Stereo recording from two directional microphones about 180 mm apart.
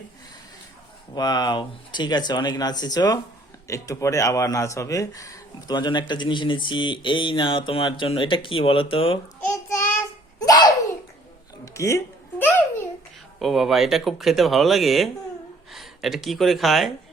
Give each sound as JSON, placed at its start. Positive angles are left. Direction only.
{"t": 1.1, "sound": "speech", "side_deg": 25}
{"t": 9.6, "sound": "child singing", "side_deg": 15}
{"t": 10.4, "sound": "a sound", "side_deg": 20}
{"t": 13.4, "sound": "speech", "side_deg": 0}